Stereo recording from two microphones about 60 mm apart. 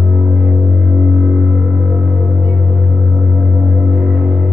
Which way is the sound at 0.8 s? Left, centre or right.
Centre.